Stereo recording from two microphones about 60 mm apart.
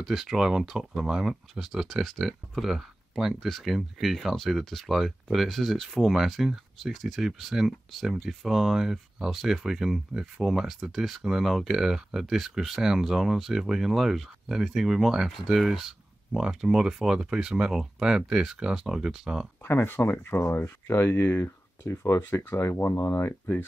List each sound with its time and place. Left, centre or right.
0.0 s speech: centre
19.6 s speech: left
21.0 s speech: left